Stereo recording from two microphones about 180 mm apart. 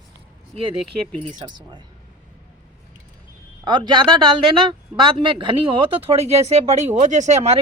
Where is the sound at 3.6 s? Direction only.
25° right (ahead or behind).